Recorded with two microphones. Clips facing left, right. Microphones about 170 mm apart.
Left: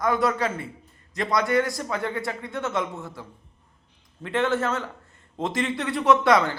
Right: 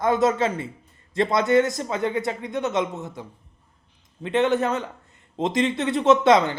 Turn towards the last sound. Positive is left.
turn(degrees=-20)  # may be behind; listen again after turning